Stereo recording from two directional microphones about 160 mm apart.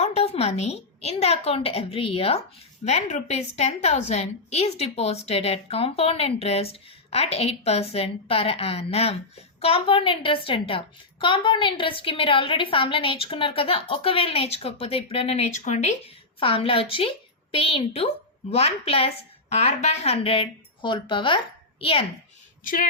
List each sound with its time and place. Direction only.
0.0 s a woman's voice: 40° left (ahead or behind)
16.4 s a woman's voice: 35° left (ahead or behind)
22.6 s speech: 60° left (ahead or behind)